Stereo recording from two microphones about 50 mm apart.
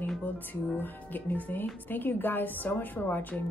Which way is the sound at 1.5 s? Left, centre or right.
Left.